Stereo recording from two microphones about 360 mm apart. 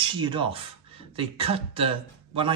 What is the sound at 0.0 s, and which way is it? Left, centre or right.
Speech, centre.